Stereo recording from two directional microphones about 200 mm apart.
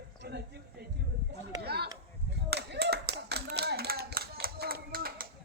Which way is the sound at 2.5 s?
55° right (ahead or behind).